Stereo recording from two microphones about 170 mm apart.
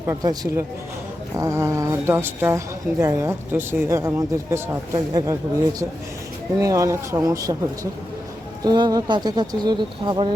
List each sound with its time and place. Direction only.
0.0 s a woman's voice: 20° right (ahead or behind)
6.6 s speech: 20° right (ahead or behind)
8.6 s speech: 25° right (ahead or behind)